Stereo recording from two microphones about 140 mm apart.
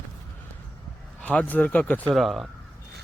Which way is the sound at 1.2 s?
10° left (ahead or behind).